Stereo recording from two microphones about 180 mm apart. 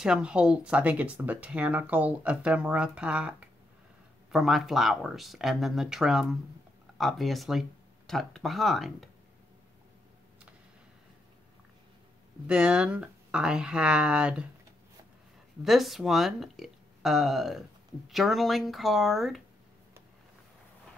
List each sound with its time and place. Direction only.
0.0 s speech: 5° right (ahead or behind)
12.4 s speech: 5° right (ahead or behind)
15.6 s speech: centre (ahead or behind)